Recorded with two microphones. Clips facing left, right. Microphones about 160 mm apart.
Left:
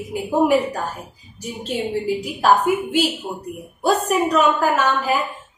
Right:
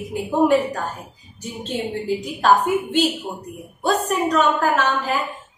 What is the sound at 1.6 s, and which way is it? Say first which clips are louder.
Speech: left 2 dB; 10° left (ahead or behind).